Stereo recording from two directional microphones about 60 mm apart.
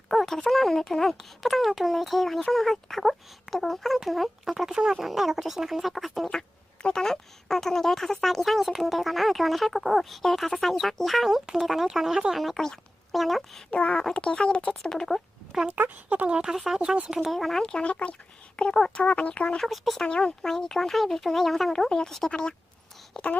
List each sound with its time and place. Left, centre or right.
0.1 s a child's voice: centre
13.7 s speech: centre
15.5 s speech: centre
17.3 s speech: centre
19.5 s a child's voice: centre
20.0 s speech: centre